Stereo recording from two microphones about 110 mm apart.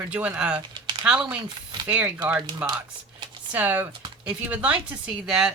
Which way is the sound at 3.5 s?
15° right (ahead or behind).